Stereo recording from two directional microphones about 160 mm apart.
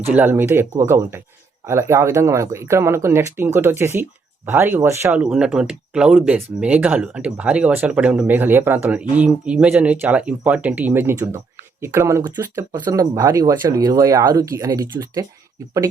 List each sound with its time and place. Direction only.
0.1 s speech: 10° right (ahead or behind)